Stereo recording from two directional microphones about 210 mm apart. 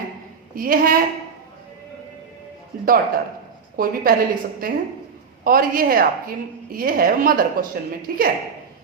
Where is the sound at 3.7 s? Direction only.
45° right (ahead or behind).